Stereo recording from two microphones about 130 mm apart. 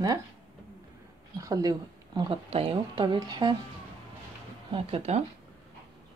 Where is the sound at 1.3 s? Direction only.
25° right (ahead or behind).